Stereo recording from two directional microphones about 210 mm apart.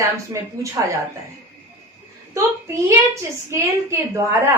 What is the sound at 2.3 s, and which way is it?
A woman's voice, 15° right (ahead or behind).